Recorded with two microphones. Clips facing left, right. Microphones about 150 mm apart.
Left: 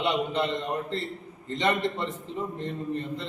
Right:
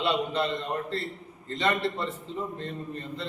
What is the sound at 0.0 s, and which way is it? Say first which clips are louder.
A man's voice: even; 20° left (ahead or behind).